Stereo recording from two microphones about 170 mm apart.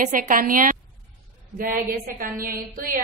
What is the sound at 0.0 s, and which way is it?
A woman's voice, 50° right (ahead or behind).